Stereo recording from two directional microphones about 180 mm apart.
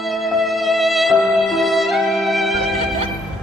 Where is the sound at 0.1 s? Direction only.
Centre (ahead or behind).